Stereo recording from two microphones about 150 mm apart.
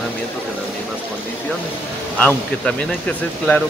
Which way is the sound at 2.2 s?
10° left (ahead or behind).